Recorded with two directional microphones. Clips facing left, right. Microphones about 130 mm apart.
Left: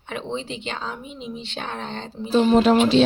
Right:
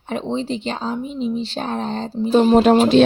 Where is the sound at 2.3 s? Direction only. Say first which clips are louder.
Right 3 dB; 50° right (ahead or behind).